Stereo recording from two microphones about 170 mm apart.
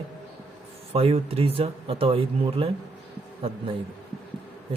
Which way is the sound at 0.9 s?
35° right (ahead or behind).